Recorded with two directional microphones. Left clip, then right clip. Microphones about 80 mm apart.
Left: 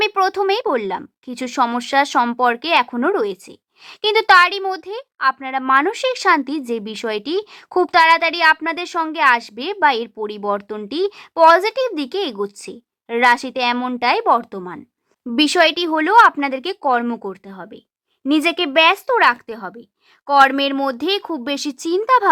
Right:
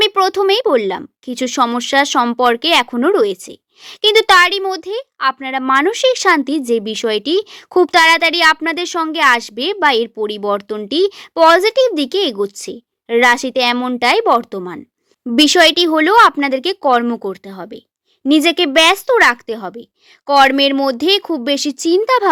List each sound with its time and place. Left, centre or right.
0.0 s a woman's voice: right
2.4 s a woman's voice: right
4.1 s a woman's voice: right
9.1 s a woman's voice: right
13.7 s speech: right
14.0 s speech: right
18.3 s a woman's voice: right